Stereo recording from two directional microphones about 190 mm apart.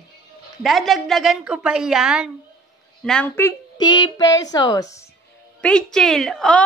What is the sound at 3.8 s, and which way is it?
A woman's voice, 25° left (ahead or behind).